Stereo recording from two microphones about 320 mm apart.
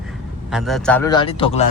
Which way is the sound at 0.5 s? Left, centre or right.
Centre.